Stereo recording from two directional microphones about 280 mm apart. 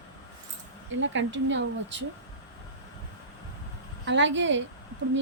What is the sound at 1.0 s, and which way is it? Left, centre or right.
A woman's voice, right.